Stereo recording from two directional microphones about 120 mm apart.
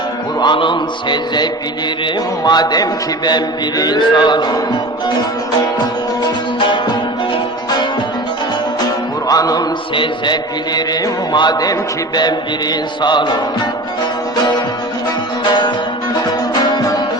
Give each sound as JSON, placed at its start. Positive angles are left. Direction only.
{"t": 0.3, "sound": "a man's voice", "side_deg": 40}
{"t": 9.2, "sound": "music", "side_deg": 30}
{"t": 9.9, "sound": "mantra", "side_deg": 45}
{"t": 10.8, "sound": "a man's voice", "side_deg": 35}